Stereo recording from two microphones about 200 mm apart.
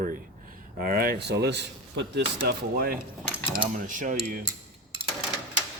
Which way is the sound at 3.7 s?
40° right (ahead or behind).